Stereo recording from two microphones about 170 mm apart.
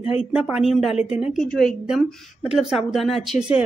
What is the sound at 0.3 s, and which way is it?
A woman's voice, 5° right (ahead or behind).